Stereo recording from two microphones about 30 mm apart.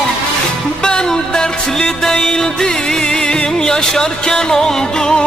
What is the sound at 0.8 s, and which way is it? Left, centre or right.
Music, left.